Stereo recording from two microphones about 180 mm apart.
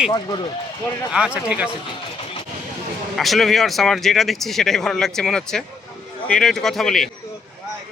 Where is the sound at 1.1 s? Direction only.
5° right (ahead or behind).